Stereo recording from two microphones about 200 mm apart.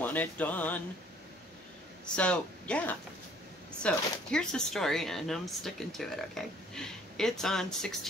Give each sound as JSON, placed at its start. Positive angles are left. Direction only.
{"t": 0.0, "sound": "music", "side_deg": 10}
{"t": 2.1, "sound": "speech", "side_deg": 5}